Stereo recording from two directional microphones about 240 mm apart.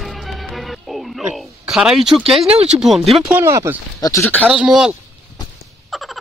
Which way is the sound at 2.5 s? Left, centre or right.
Right.